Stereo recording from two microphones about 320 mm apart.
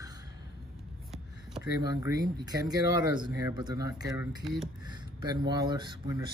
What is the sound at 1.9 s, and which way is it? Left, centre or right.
Speech, centre.